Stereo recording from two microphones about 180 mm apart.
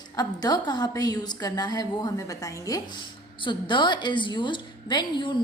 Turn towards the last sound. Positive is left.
turn(degrees=25)  # may be behind; listen again after turning